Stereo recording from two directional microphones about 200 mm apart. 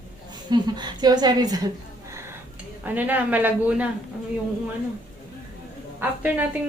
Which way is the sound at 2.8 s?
10° right (ahead or behind).